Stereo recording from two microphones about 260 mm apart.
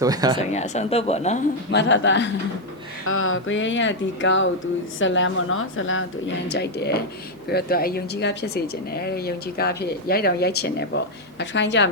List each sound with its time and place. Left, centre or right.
0.0 s speech: centre
0.5 s speech: left
1.7 s a woman's voice: left